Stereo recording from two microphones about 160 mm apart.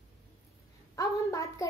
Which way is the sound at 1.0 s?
20° left (ahead or behind).